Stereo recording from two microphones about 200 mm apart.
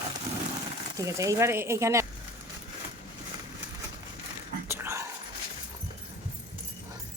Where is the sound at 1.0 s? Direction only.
15° right (ahead or behind).